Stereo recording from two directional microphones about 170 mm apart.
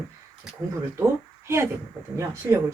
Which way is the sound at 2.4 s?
15° right (ahead or behind).